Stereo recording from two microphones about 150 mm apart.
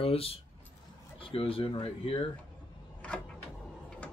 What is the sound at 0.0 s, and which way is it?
Speech, 40° left (ahead or behind).